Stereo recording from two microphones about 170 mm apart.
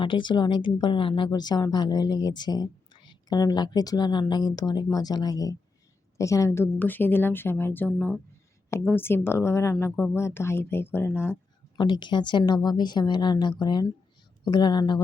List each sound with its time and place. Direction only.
0.0 s a woman's voice: 30° left (ahead or behind)
11.8 s a woman's voice: 25° left (ahead or behind)